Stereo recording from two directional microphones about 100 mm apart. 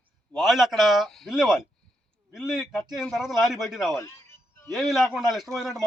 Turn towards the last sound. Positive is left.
turn(degrees=0)  # may be behind; listen again after turning